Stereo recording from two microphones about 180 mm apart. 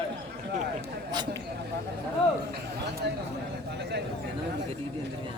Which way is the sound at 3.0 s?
65° right (ahead or behind).